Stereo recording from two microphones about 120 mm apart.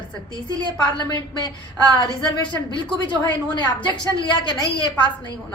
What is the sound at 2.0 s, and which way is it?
A woman's voice, 40° left (ahead or behind).